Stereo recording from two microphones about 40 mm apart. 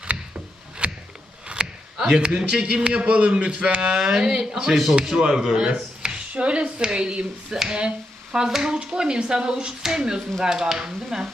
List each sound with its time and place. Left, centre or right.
0.8 s a sound: right
2.3 s a man's voice: right
3.9 s speech: centre
8.4 s a man's voice: centre